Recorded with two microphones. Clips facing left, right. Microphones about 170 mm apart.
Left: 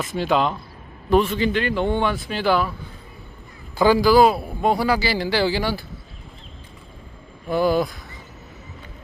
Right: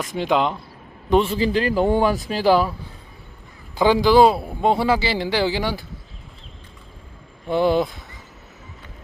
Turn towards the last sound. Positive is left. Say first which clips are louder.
# right 1 dB
turn(degrees=-25)  # may be behind; listen again after turning